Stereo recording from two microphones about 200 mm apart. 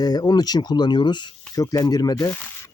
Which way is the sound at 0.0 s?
20° left (ahead or behind).